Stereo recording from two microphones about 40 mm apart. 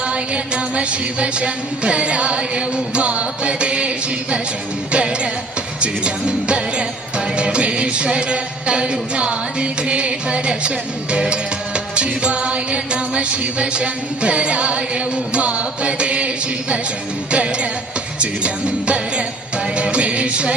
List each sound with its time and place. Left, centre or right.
0.0 s music: right